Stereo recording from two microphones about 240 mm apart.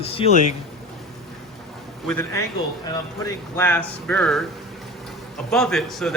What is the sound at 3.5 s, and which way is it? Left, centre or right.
Speech, centre.